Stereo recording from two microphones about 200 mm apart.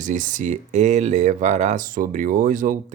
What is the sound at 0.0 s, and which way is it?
Speech, 40° right (ahead or behind).